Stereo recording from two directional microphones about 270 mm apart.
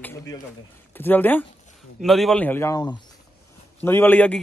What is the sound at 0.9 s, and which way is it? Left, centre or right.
A man's voice, centre.